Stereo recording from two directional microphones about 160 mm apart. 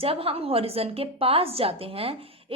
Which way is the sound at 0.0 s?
35° right (ahead or behind).